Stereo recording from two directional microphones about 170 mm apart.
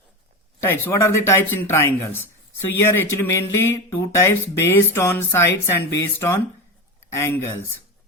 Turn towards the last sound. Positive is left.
turn(degrees=15)  # may be behind; listen again after turning